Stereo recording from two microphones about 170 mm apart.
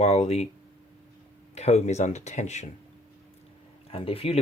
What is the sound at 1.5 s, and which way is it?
Speech, 40° left (ahead or behind).